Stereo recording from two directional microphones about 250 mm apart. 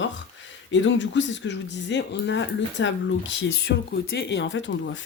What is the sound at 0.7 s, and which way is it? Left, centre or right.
Speech, left.